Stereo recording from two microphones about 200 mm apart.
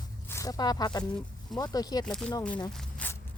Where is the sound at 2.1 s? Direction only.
5° left (ahead or behind).